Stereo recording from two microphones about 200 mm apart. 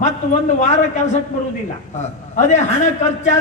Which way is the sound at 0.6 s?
35° left (ahead or behind).